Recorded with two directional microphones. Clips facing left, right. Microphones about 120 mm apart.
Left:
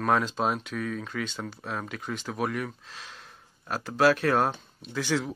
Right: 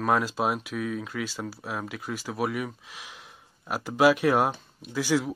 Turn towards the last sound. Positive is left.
turn(degrees=-10)  # may be behind; listen again after turning